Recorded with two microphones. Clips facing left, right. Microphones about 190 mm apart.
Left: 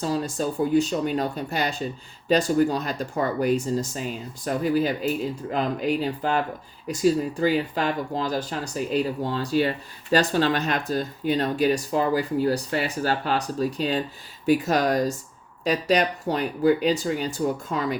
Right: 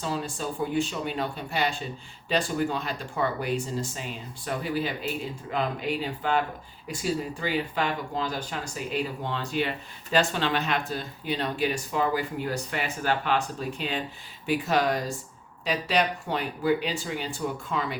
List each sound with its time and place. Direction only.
0.0 s speech: 40° left (ahead or behind)